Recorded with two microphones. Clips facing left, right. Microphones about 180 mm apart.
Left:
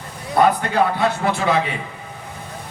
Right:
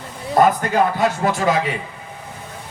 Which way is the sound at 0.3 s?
45° right (ahead or behind).